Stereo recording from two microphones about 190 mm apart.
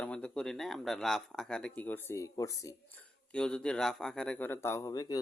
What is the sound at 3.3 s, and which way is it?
Speech, 5° left (ahead or behind).